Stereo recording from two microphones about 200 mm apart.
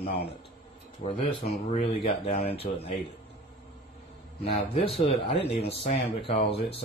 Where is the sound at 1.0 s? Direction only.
30° left (ahead or behind).